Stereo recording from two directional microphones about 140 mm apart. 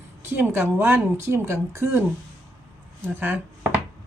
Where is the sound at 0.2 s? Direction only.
15° right (ahead or behind).